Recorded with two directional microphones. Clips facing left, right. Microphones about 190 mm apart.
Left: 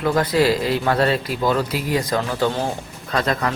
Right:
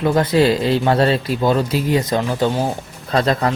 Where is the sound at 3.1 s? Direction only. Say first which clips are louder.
Right 4 dB; 30° right (ahead or behind).